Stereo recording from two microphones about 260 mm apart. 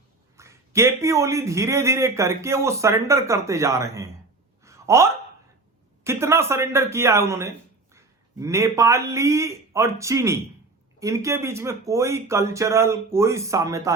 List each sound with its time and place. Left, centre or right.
0.3 s a man's voice: centre
4.6 s a sound: centre
6.1 s a man's voice: centre